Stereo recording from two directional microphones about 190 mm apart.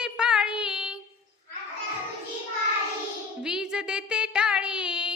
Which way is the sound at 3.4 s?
5° right (ahead or behind).